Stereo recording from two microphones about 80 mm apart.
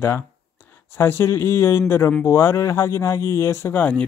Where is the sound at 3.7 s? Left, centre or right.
Centre.